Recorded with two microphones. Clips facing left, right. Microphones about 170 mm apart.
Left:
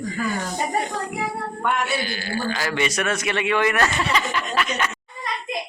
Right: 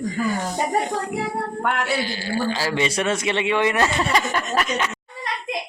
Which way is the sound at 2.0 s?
30° right (ahead or behind).